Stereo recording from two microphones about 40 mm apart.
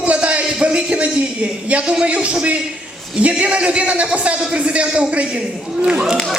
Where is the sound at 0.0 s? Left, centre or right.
Right.